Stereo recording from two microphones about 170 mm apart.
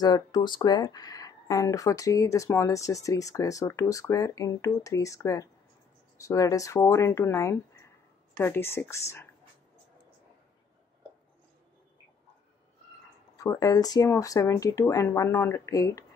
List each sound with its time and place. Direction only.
0.0 s speech: 25° left (ahead or behind)
13.4 s speech: 20° left (ahead or behind)